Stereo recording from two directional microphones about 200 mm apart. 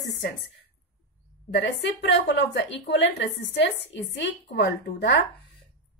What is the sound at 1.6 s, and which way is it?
A woman's voice, 60° left (ahead or behind).